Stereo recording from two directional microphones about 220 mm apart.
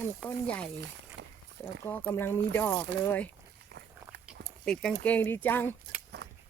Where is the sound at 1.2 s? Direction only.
50° right (ahead or behind).